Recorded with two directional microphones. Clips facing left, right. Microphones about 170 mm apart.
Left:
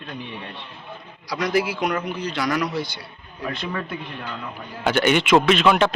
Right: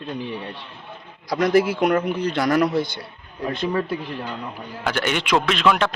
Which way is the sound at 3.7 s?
30° right (ahead or behind).